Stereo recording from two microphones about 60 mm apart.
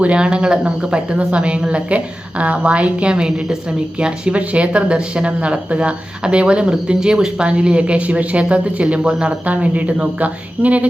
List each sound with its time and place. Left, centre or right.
0.0 s speech: centre